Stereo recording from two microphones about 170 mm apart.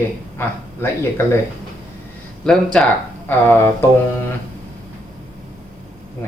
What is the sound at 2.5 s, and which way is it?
Speech, 5° left (ahead or behind).